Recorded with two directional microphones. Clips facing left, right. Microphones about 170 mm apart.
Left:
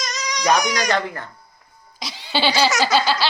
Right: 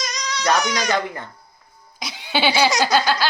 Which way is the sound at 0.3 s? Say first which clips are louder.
Left 1 dB; 15° left (ahead or behind).